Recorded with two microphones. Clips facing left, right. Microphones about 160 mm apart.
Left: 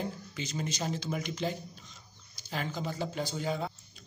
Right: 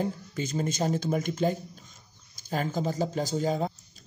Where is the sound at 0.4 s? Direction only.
50° right (ahead or behind).